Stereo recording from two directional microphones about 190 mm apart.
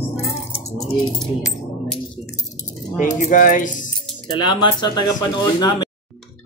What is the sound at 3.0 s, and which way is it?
Speech, 40° left (ahead or behind).